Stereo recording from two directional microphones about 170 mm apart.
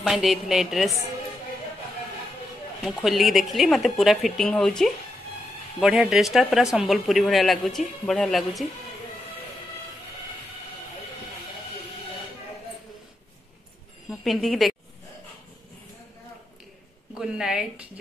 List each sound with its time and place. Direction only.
0.0 s speech: centre (ahead or behind)
2.8 s speech: centre (ahead or behind)
14.2 s speech: centre (ahead or behind)
17.1 s speech: 5° right (ahead or behind)